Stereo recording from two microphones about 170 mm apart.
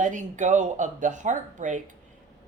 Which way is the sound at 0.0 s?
45° right (ahead or behind).